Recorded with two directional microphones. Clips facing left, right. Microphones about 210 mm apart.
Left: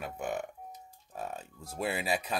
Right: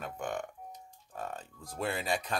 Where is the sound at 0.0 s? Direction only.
5° left (ahead or behind).